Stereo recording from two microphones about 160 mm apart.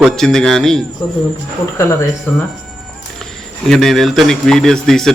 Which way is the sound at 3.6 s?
Centre (ahead or behind).